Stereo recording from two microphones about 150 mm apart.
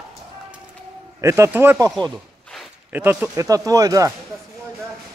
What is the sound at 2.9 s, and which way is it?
Speech, 10° right (ahead or behind).